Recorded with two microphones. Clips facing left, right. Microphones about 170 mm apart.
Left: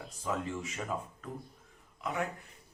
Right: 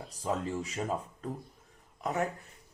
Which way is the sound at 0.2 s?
35° right (ahead or behind).